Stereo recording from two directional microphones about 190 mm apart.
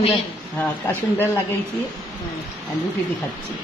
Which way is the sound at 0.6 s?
10° left (ahead or behind).